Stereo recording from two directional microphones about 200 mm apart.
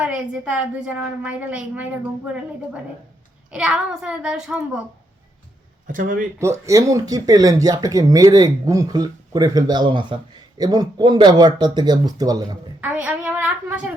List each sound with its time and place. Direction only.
0.0 s speech: 5° right (ahead or behind)
3.5 s a child's voice: 5° right (ahead or behind)
5.9 s speech: 40° right (ahead or behind)
6.4 s speech: 15° right (ahead or behind)
12.8 s speech: 5° right (ahead or behind)